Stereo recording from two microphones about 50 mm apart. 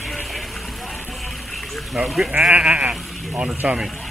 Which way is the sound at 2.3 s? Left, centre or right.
Right.